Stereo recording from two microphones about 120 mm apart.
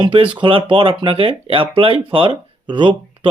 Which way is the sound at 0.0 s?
45° right (ahead or behind).